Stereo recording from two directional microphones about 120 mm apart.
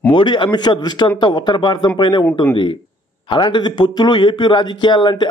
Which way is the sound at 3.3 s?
40° left (ahead or behind).